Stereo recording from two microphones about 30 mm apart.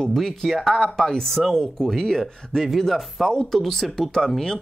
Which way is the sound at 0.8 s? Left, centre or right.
Centre.